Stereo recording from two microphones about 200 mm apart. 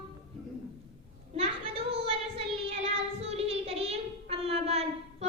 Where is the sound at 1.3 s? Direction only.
30° right (ahead or behind).